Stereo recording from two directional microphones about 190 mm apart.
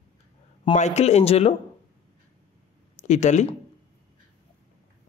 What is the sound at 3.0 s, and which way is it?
Speech, 40° left (ahead or behind).